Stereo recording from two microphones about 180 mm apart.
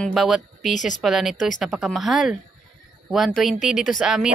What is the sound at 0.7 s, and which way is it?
Speech, 45° left (ahead or behind).